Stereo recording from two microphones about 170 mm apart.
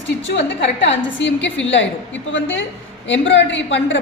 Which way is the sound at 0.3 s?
90° left.